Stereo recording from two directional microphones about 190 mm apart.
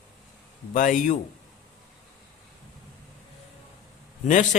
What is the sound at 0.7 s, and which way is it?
Speech, 45° left (ahead or behind).